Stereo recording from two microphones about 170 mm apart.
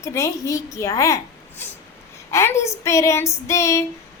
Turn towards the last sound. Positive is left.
turn(degrees=15)  # may be behind; listen again after turning